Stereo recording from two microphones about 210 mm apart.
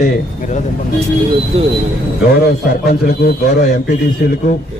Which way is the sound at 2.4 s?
45° left (ahead or behind).